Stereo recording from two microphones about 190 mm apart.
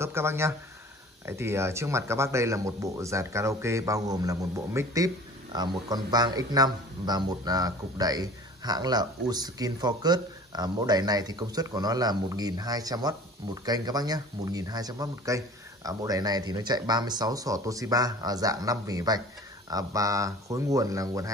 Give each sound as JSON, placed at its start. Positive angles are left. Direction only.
{"t": 0.0, "sound": "speech", "side_deg": -15}